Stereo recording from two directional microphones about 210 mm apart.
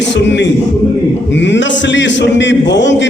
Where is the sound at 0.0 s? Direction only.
55° left (ahead or behind).